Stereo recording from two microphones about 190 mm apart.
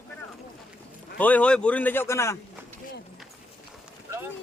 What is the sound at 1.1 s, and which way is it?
A man's voice, 10° left (ahead or behind).